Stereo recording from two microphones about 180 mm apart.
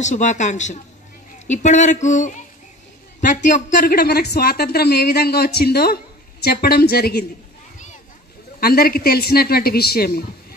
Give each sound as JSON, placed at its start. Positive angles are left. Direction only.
{"t": 0.0, "sound": "speech", "side_deg": 40}
{"t": 8.5, "sound": "speech", "side_deg": 55}